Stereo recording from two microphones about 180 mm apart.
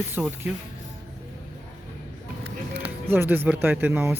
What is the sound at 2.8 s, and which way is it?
Speech, 10° right (ahead or behind).